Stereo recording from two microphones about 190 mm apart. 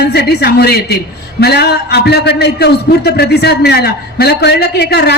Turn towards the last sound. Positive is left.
turn(degrees=60)  # may be behind; listen again after turning